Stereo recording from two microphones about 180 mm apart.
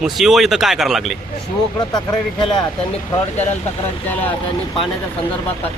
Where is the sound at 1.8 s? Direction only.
25° left (ahead or behind).